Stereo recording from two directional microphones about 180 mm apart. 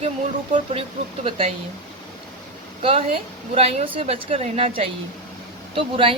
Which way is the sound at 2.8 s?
30° right (ahead or behind).